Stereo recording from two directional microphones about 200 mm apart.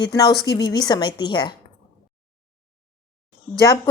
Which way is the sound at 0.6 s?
20° left (ahead or behind).